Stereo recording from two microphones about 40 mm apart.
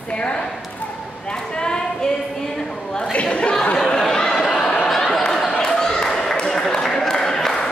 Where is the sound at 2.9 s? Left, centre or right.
Left.